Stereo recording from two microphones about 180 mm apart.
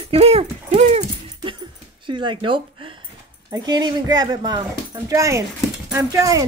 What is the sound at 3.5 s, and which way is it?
Speech, 20° right (ahead or behind).